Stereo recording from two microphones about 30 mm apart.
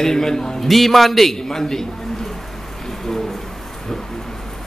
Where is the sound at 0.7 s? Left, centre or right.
Centre.